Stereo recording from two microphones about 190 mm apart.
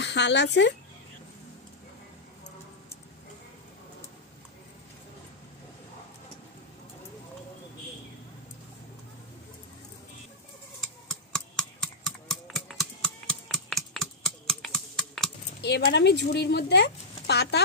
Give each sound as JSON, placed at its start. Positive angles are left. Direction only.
{"t": 0.0, "sound": "speech", "side_deg": 65}
{"t": 11.1, "sound": "typing", "side_deg": 5}
{"t": 15.6, "sound": "speech", "side_deg": 60}